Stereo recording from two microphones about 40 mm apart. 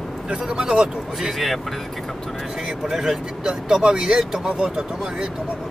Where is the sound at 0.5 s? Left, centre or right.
Right.